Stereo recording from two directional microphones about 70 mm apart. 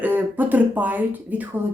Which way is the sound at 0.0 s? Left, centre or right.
Right.